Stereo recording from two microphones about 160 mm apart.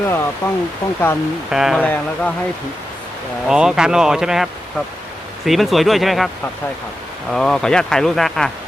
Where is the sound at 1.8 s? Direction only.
10° left (ahead or behind).